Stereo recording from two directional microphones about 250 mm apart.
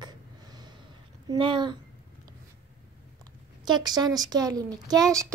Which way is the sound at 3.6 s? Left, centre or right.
Centre.